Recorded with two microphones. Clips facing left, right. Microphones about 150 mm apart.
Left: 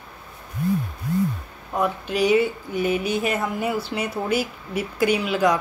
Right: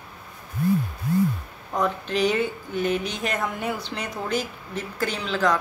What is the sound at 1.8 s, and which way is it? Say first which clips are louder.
Speech: left 1 dB; 10° left (ahead or behind).